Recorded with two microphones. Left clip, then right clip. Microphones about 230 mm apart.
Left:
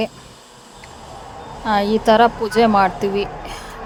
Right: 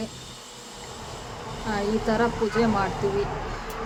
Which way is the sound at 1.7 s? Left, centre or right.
Left.